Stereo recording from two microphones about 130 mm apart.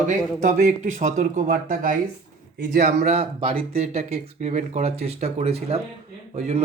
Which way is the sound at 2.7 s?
70° right (ahead or behind).